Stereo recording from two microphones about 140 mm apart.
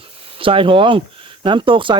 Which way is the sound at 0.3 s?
40° right (ahead or behind).